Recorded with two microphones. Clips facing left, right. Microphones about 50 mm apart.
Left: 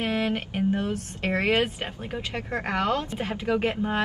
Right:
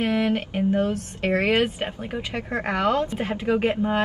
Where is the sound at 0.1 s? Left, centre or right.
Centre.